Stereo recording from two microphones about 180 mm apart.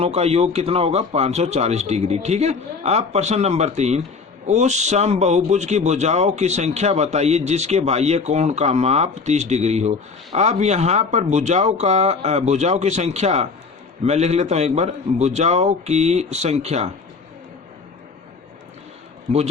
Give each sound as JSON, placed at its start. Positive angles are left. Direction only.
{"t": 0.0, "sound": "a man's voice", "side_deg": -35}